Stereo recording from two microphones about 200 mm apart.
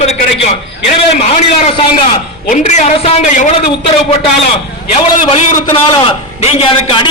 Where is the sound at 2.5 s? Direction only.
35° left (ahead or behind).